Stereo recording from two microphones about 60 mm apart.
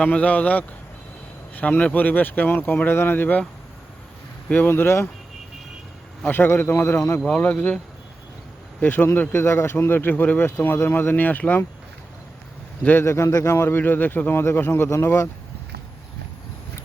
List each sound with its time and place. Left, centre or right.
0.0 s a man's voice: left
1.9 s speech: left
4.6 s speech: left
6.3 s speech: left
7.3 s a man's voice: left
8.8 s a man's voice: left
10.4 s speech: left
13.1 s a man's voice: left
13.7 s a man's voice: left